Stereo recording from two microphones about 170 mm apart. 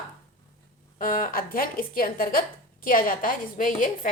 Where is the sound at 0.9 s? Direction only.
55° left (ahead or behind).